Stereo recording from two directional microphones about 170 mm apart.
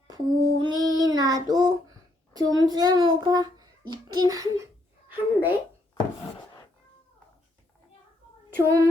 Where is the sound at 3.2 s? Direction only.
25° right (ahead or behind).